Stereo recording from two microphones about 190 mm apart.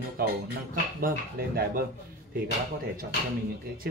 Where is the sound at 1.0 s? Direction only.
55° right (ahead or behind).